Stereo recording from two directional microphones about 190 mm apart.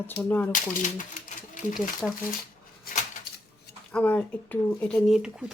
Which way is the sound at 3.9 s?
5° left (ahead or behind).